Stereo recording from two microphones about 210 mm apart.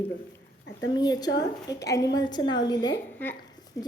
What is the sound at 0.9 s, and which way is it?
A woman's voice, 20° left (ahead or behind).